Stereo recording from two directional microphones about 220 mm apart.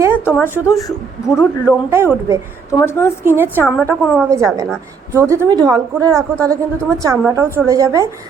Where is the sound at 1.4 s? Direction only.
10° right (ahead or behind).